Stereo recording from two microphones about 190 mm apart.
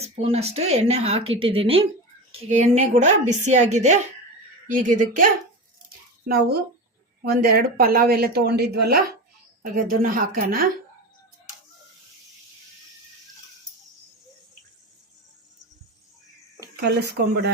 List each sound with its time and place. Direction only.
0.0 s speech: 35° right (ahead or behind); by 10.7 s 50° right (ahead or behind)
16.8 s speech: 65° right (ahead or behind)